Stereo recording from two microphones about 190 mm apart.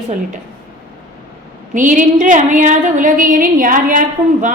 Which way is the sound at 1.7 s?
40° right (ahead or behind).